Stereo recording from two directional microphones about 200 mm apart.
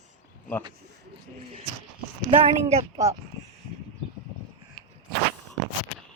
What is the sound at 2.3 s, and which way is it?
Speech, 30° right (ahead or behind).